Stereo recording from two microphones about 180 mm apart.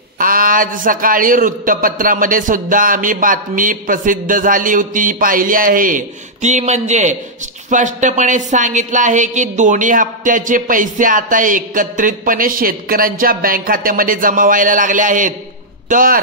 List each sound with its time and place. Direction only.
0.2 s a woman's voice: 50° right (ahead or behind)